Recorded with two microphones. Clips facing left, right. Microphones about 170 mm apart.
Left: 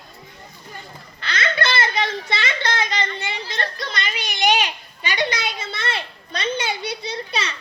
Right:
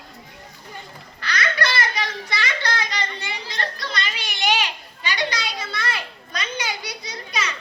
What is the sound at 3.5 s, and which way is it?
Children playing, 20° left (ahead or behind).